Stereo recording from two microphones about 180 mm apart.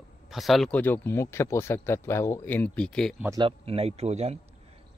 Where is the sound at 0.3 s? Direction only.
Centre (ahead or behind).